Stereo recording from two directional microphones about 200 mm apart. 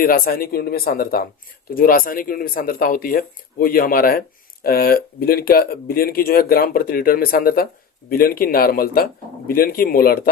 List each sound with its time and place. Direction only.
0.0 s speech: 50° left (ahead or behind)